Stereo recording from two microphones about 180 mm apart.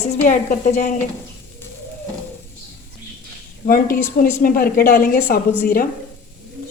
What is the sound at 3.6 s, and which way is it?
A woman's voice, 50° left (ahead or behind).